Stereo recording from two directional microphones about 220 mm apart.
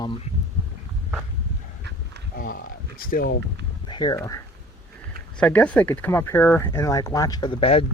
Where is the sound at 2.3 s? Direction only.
45° left (ahead or behind).